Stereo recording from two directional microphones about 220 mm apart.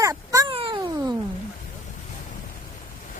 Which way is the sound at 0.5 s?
20° right (ahead or behind).